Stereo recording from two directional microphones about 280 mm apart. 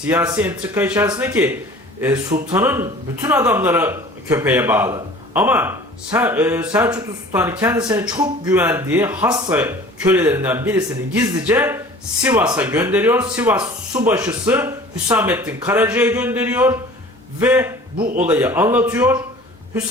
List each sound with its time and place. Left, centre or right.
0.1 s speech: centre
18.0 s speech: right
18.3 s speech: centre